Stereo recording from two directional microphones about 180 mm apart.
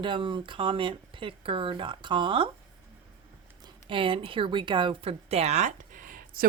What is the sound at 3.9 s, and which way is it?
Speech, 30° right (ahead or behind).